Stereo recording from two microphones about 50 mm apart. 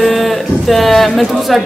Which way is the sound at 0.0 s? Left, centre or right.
Centre.